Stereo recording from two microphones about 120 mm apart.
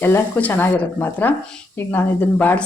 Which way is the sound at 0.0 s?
15° left (ahead or behind).